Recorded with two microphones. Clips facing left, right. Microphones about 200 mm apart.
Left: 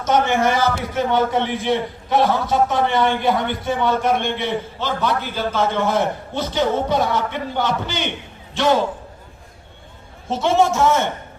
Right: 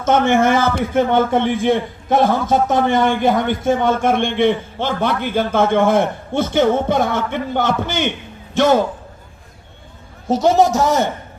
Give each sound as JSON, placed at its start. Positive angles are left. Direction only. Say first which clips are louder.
{"t": 0.0, "sound": "a man's voice", "louder": "right 3 dB", "side_deg": -50}
{"t": 10.2, "sound": "a man's voice", "louder": "right 4 dB", "side_deg": -40}